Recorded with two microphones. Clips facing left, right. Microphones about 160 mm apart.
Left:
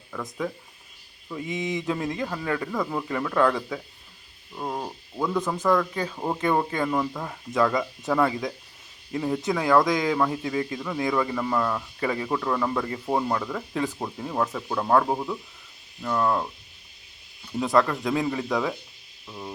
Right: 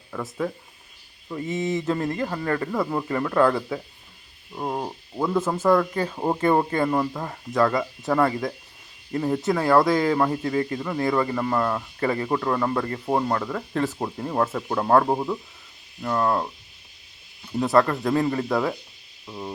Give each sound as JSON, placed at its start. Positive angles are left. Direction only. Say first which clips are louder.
{"t": 0.1, "sound": "speech", "louder": "right 3 dB", "side_deg": -5}
{"t": 1.5, "sound": "speech", "louder": "right 3 dB", "side_deg": 0}
{"t": 2.6, "sound": "speech", "louder": "right 3 dB", "side_deg": -10}
{"t": 7.5, "sound": "speech", "louder": "right 2 dB", "side_deg": 0}
{"t": 15.1, "sound": "speech", "louder": "right 3 dB", "side_deg": -20}
{"t": 16.0, "sound": "speech", "louder": "right 1 dB", "side_deg": -10}
{"t": 17.6, "sound": "speech", "louder": "right 2 dB", "side_deg": 0}
{"t": 19.3, "sound": "speech", "louder": "right 3 dB", "side_deg": -15}